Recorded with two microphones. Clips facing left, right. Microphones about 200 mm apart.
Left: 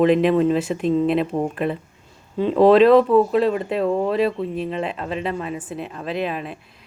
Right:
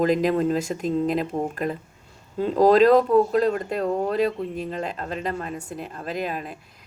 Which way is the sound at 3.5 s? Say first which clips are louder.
Left 4 dB; 5° left (ahead or behind).